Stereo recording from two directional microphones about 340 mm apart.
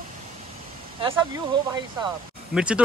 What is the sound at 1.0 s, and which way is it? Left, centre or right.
Speech, centre.